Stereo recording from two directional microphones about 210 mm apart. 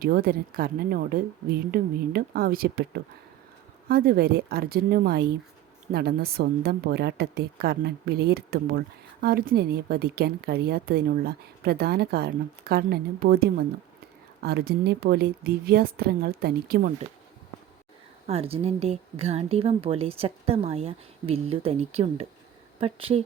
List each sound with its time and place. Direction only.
0.0 s a woman's voice: 45° right (ahead or behind)
18.3 s a woman's voice: 30° right (ahead or behind)